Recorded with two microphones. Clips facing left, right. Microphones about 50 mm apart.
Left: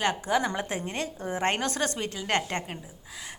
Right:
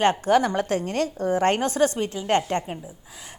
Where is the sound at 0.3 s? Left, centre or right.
Right.